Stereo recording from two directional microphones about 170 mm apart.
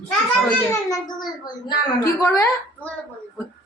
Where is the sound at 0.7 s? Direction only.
20° left (ahead or behind).